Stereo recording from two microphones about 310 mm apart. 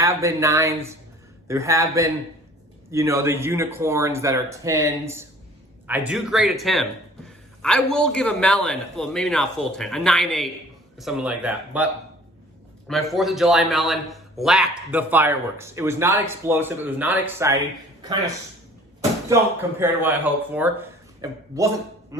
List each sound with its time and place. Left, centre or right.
0.0 s a man's voice: centre
12.9 s a man's voice: centre
19.8 s speech: centre